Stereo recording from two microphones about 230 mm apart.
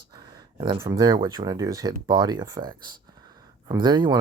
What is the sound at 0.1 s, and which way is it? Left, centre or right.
Speech, centre.